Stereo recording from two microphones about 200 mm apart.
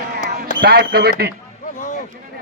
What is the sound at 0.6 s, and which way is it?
Speech, 50° right (ahead or behind).